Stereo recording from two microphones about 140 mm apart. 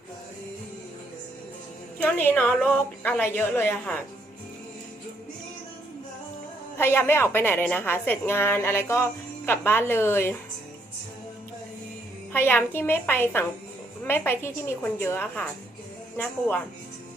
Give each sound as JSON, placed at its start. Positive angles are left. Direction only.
{"t": 2.0, "sound": "a woman's voice", "side_deg": 10}
{"t": 6.7, "sound": "a woman's voice", "side_deg": 15}
{"t": 12.3, "sound": "a woman's voice", "side_deg": 15}